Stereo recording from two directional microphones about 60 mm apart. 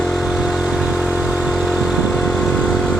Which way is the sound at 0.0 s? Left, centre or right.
Centre.